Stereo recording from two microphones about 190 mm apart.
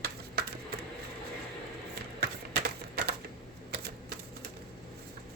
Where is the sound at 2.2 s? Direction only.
55° right (ahead or behind).